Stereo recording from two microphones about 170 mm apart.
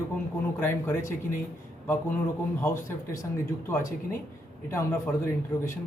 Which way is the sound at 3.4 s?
15° left (ahead or behind).